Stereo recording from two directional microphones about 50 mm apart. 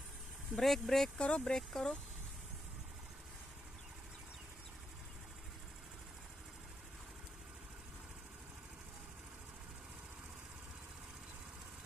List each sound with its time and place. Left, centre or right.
0.6 s speech: centre
1.1 s speech: left